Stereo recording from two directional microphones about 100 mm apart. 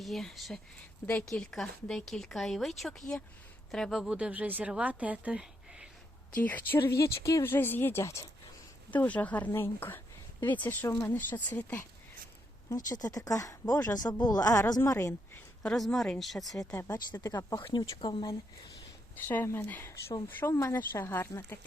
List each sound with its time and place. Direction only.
0.0 s speech: 5° left (ahead or behind)
1.0 s speech: 15° left (ahead or behind); by 5.9 s 10° right (ahead or behind)
6.3 s speech: 15° left (ahead or behind); by 7.4 s 30° left (ahead or behind)
7.4 s speech: 20° left (ahead or behind)
8.9 s speech: 15° left (ahead or behind)
12.7 s speech: 35° left (ahead or behind)
15.6 s speech: 5° left (ahead or behind)
16.7 s speech: 25° left (ahead or behind)
17.2 s speech: 40° left (ahead or behind)
19.3 s speech: 20° left (ahead or behind)